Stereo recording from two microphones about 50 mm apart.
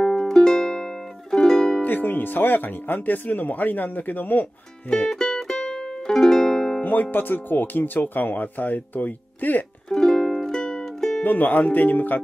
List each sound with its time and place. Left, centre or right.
0.0 s music: centre
1.8 s speech: left
4.8 s music: left
5.1 s music: centre
6.8 s speech: left
9.8 s music: centre
11.2 s speech: left